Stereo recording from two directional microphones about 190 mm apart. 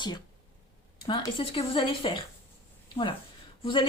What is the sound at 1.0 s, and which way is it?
A woman's voice, 25° left (ahead or behind).